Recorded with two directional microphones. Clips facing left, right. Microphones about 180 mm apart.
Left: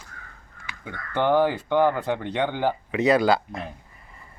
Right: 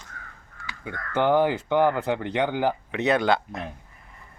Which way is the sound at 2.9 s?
Centre (ahead or behind).